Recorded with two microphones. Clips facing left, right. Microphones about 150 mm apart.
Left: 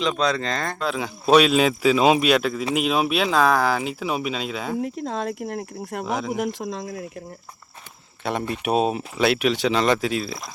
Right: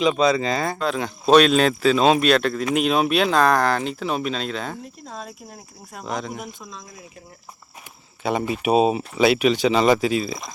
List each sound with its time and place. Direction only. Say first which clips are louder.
0.0 s speech: right 4 dB; 5° right (ahead or behind)
4.8 s speech: left 10 dB; 90° left; by 6.1 s 70° left (ahead or behind)
6.1 s speech: left 1 dB; 5° left (ahead or behind)
6.3 s speech: left 9 dB; 85° left
8.2 s speech: right 3 dB; centre (ahead or behind)